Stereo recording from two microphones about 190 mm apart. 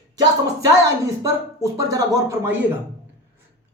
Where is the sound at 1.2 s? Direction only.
15° right (ahead or behind).